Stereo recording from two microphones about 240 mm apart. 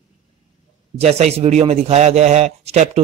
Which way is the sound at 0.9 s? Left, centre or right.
Right.